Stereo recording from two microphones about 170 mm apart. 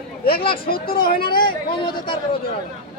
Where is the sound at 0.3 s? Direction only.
60° left (ahead or behind).